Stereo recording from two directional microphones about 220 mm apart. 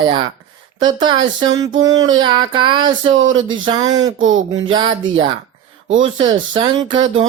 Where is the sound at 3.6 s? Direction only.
15° right (ahead or behind).